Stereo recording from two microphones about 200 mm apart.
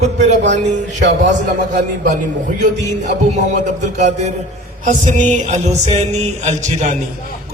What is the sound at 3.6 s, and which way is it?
Music, 35° right (ahead or behind).